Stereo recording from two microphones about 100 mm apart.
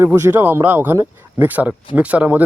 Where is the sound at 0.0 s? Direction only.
25° right (ahead or behind).